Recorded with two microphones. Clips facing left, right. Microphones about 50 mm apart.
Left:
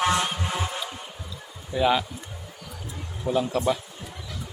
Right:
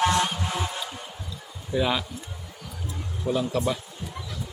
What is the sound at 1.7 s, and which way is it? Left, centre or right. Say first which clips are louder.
Music: left 3 dB; centre.